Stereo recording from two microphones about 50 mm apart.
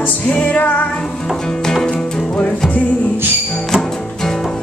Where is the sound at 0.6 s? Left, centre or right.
Left.